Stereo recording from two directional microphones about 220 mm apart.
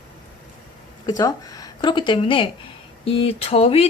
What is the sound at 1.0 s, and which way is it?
Speech, 15° left (ahead or behind).